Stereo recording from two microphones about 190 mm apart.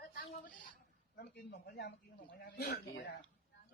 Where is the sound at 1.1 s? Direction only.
55° left (ahead or behind).